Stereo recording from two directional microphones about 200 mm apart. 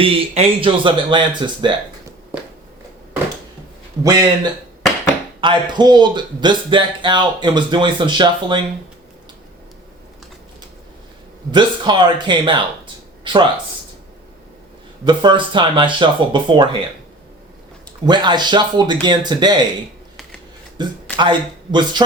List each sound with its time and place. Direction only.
0.0 s speech: 25° right (ahead or behind)
4.0 s speech: 20° right (ahead or behind)
5.4 s speech: 25° right (ahead or behind)
11.5 s speech: 20° right (ahead or behind)
15.0 s speech: 25° right (ahead or behind)
18.0 s speech: 20° right (ahead or behind)
20.8 s speech: 20° right (ahead or behind)